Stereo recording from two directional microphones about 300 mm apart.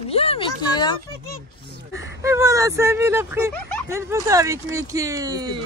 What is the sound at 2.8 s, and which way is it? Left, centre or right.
Speech, centre.